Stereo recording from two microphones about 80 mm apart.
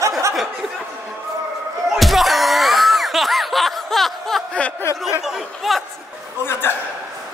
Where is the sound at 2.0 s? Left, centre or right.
Centre.